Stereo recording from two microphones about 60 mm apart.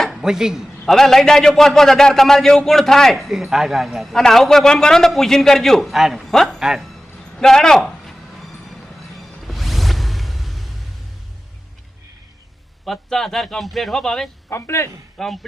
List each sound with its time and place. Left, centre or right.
0.1 s a man's voice: centre
0.9 s a man's voice: centre
6.3 s speech: centre
6.6 s music: centre
7.8 s a sound: centre
12.8 s a man's voice: centre
14.5 s a man's voice: left
15.2 s a man's voice: centre